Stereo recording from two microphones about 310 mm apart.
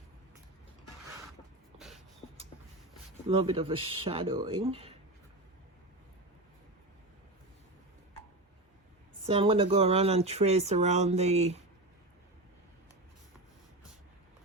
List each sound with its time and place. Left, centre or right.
3.2 s speech: centre
9.2 s speech: centre